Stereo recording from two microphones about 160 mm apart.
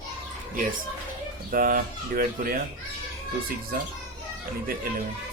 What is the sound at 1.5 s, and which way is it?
A man's voice, 60° right (ahead or behind).